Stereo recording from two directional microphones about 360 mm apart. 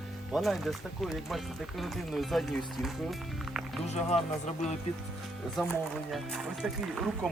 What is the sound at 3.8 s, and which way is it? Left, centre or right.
Speech, centre.